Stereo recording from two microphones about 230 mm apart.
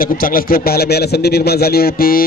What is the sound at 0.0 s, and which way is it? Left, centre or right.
A man's voice, left.